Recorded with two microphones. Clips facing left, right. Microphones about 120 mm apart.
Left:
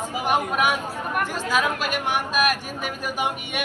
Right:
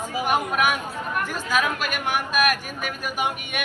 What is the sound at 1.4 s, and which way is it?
A man's voice, 30° left (ahead or behind).